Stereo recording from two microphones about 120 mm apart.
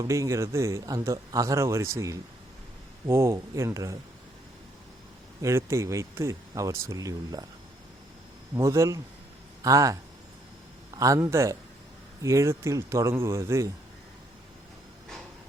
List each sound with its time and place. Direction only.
0.0 s a man's voice: 25° right (ahead or behind)
5.4 s a man's voice: 25° right (ahead or behind)
8.5 s a man's voice: 25° right (ahead or behind)